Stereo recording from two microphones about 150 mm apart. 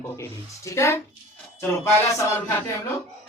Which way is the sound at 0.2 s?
20° left (ahead or behind).